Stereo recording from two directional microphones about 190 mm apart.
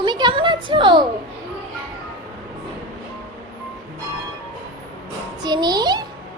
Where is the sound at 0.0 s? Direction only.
25° right (ahead or behind).